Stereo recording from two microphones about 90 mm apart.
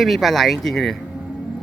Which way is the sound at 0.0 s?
Centre (ahead or behind).